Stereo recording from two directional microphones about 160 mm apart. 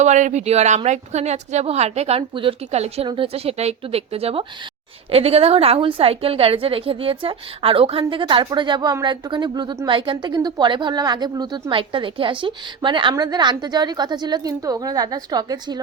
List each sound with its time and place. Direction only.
0.0 s a woman's voice: 50° right (ahead or behind); by 15.8 s 25° right (ahead or behind)